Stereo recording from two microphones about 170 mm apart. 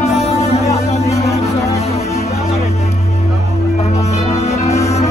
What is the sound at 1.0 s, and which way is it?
Music, 20° left (ahead or behind).